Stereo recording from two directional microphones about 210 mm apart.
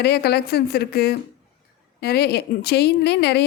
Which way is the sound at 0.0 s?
50° left (ahead or behind).